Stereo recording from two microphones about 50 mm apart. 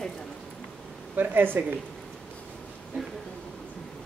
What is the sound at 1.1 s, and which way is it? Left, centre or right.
Speech, right.